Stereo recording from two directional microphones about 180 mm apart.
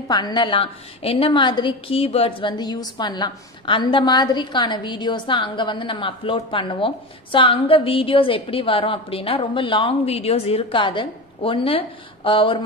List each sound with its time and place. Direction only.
0.1 s a woman's voice: 25° left (ahead or behind)